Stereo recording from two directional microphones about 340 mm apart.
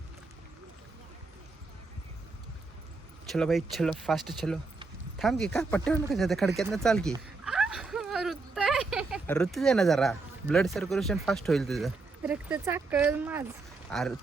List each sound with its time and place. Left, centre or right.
3.2 s speech: centre